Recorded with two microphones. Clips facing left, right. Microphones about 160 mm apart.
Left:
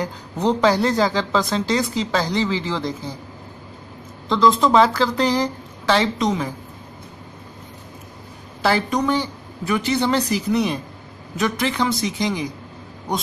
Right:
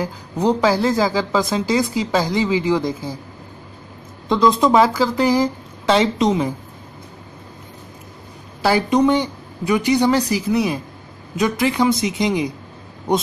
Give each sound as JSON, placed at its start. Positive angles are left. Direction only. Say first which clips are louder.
{"t": 0.0, "sound": "speech", "louder": "right 2 dB", "side_deg": -10}
{"t": 4.3, "sound": "speech", "louder": "right 1 dB", "side_deg": -20}
{"t": 8.9, "sound": "speech", "louder": "right 5 dB", "side_deg": -20}